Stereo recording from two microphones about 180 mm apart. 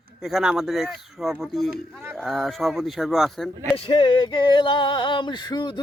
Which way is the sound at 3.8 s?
30° left (ahead or behind).